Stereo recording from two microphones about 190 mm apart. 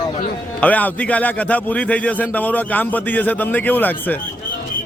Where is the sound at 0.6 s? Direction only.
10° left (ahead or behind).